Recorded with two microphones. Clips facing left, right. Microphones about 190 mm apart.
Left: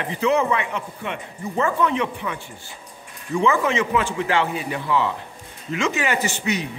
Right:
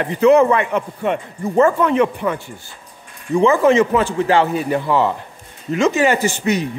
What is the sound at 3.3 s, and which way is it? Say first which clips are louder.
A man's voice: right 7 dB; 40° right (ahead or behind).